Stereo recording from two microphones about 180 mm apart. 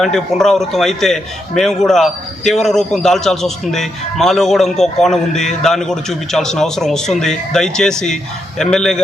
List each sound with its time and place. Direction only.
0.0 s a man's voice: centre (ahead or behind)